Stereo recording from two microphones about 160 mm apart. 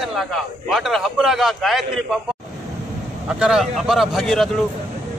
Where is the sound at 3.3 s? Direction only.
5° right (ahead or behind).